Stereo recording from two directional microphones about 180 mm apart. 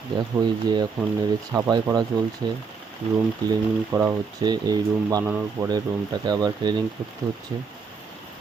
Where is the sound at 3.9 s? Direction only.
20° right (ahead or behind).